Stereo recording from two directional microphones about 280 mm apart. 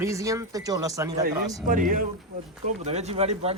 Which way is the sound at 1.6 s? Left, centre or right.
Right.